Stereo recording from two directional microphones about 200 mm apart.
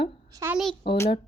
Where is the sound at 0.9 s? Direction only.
25° left (ahead or behind).